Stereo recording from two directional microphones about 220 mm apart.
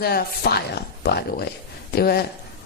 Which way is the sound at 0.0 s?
45° left (ahead or behind).